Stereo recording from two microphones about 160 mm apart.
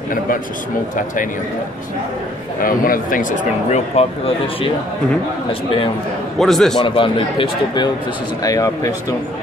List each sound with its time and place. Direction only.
2.6 s speech: 60° left (ahead or behind); by 4.1 s 45° left (ahead or behind)
5.5 s a man's voice: 35° left (ahead or behind)
6.3 s a man's voice: centre (ahead or behind)
6.8 s a man's voice: 30° left (ahead or behind)